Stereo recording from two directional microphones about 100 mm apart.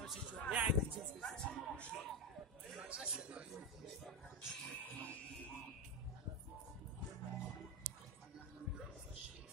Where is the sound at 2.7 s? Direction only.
10° right (ahead or behind).